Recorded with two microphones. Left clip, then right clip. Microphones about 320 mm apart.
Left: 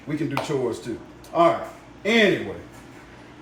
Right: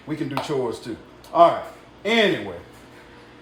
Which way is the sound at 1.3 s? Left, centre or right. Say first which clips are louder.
Right 4 dB; centre.